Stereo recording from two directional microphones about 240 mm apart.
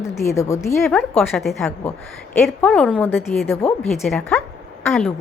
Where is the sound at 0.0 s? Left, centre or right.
Centre.